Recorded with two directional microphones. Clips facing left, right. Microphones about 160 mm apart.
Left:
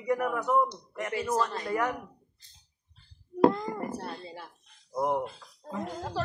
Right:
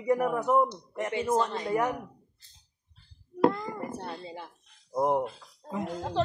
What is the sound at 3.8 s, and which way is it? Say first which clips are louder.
Speech: left 1 dB; 20° right (ahead or behind).